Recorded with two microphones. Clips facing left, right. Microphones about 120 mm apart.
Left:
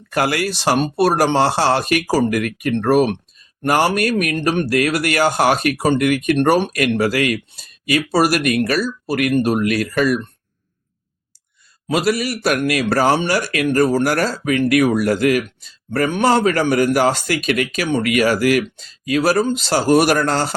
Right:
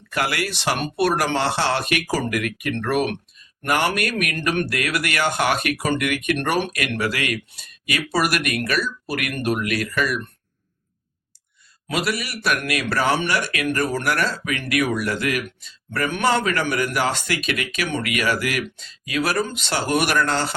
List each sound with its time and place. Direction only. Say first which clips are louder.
0.1 s speech: left 5 dB; 40° left (ahead or behind)
11.9 s speech: left 7 dB; 40° left (ahead or behind)